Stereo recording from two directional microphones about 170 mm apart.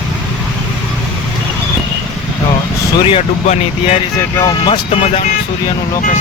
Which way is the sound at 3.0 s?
30° left (ahead or behind).